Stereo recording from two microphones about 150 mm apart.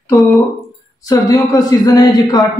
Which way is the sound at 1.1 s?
25° left (ahead or behind).